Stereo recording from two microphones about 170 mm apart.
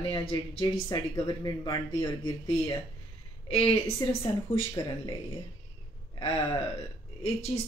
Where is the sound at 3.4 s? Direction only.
35° left (ahead or behind).